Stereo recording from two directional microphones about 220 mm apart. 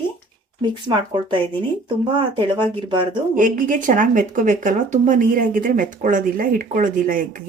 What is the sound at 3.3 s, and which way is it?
Speech, 35° right (ahead or behind).